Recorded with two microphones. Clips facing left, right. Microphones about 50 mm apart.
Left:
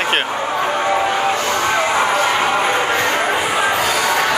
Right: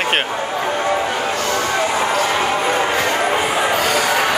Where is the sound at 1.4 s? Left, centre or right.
Left.